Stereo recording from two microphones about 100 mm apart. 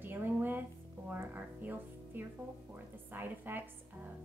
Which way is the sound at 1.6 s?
20° right (ahead or behind).